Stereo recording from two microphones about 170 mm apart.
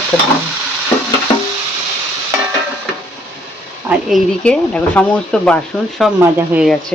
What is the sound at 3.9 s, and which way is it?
Speech, centre (ahead or behind).